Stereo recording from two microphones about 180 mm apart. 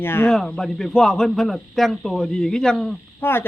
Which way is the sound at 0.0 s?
10° left (ahead or behind).